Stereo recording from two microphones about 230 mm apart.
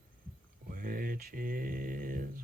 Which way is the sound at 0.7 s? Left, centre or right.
Right.